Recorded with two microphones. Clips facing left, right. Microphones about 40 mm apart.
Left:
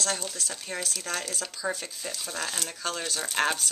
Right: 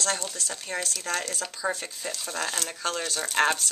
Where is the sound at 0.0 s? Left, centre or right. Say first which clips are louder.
Right 2 dB; centre.